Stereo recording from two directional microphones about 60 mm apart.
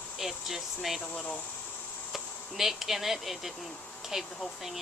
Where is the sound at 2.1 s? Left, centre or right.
Centre.